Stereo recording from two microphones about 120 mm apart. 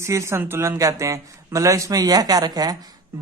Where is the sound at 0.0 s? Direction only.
25° right (ahead or behind).